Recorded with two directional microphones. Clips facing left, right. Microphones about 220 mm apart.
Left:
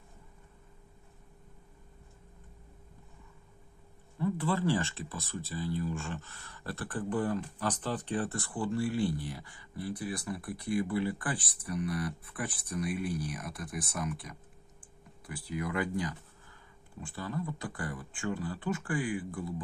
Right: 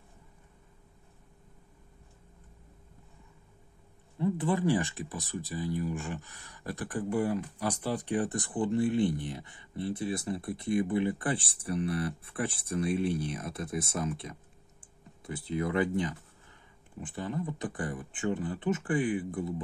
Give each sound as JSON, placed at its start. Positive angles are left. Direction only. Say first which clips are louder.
{"t": 4.2, "sound": "speech", "louder": "right 2 dB", "side_deg": -20}